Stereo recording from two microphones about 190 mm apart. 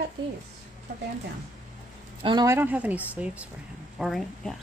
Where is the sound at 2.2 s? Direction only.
20° right (ahead or behind); by 4.6 s centre (ahead or behind).